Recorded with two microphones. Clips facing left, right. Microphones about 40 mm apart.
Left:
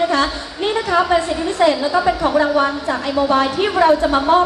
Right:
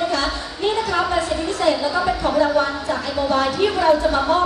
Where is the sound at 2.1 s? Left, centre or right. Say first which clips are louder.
Left 1 dB; left.